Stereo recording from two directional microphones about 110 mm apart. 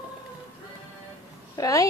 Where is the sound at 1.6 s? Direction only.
30° left (ahead or behind).